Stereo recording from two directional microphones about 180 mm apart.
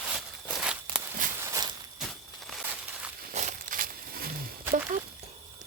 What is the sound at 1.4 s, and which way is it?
Walk, 20° right (ahead or behind).